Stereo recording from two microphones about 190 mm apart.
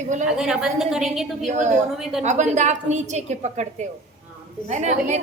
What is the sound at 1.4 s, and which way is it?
Speech, 40° right (ahead or behind).